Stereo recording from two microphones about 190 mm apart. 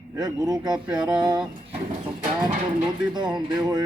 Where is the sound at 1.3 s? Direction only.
20° right (ahead or behind).